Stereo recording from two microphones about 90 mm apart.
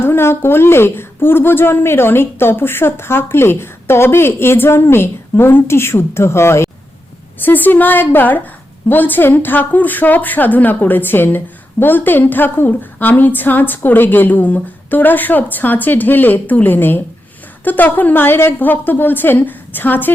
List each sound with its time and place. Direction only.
0.0 s a woman's voice: 25° left (ahead or behind)